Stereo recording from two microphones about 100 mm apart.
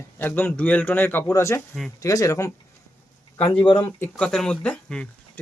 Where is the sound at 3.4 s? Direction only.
55° left (ahead or behind).